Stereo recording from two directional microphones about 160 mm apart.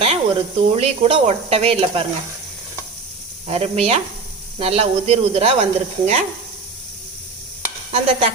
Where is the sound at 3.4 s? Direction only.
40° right (ahead or behind).